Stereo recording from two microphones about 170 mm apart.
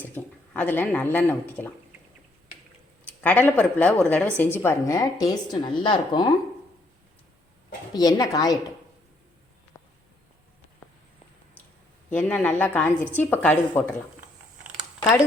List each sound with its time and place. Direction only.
0.0 s speech: 10° left (ahead or behind)
3.2 s a woman's voice: 10° left (ahead or behind); by 6.2 s 25° left (ahead or behind)
7.9 s a woman's voice: 20° left (ahead or behind)
9.7 s a sound: 20° left (ahead or behind)
12.1 s a woman's voice: 10° left (ahead or behind)